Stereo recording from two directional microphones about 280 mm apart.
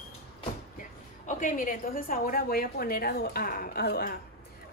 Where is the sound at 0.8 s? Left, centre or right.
Left.